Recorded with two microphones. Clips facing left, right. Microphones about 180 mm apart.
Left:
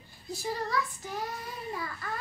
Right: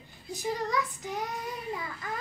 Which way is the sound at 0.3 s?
20° right (ahead or behind).